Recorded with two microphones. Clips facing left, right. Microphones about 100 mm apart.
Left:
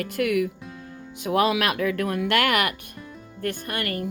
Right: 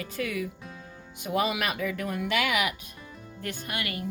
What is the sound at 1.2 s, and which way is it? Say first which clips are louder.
A woman's voice: left 6 dB; 90° left.